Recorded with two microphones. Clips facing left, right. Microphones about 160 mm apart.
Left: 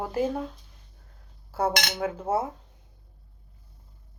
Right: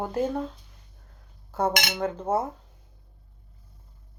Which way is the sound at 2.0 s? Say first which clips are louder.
Right 1 dB; 5° left (ahead or behind).